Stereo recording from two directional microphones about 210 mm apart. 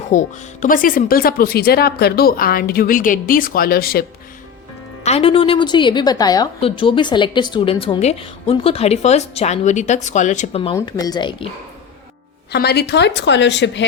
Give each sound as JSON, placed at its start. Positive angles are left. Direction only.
{"t": 0.1, "sound": "speech", "side_deg": 35}
{"t": 5.0, "sound": "a woman's voice", "side_deg": 30}
{"t": 10.8, "sound": "a woman's voice", "side_deg": 15}
{"t": 12.5, "sound": "a woman's voice", "side_deg": 50}